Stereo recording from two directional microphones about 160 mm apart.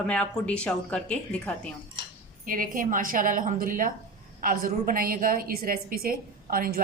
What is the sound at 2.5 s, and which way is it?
A woman's voice, 60° right (ahead or behind).